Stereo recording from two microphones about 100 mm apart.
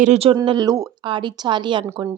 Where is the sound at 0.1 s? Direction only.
80° right.